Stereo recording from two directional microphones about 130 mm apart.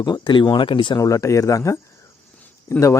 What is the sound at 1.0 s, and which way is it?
Speech, 25° left (ahead or behind).